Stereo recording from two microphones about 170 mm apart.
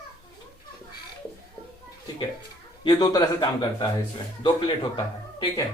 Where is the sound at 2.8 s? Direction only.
25° left (ahead or behind).